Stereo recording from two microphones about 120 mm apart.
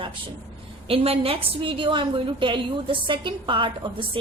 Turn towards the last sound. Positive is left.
turn(degrees=-45)  # may be behind; listen again after turning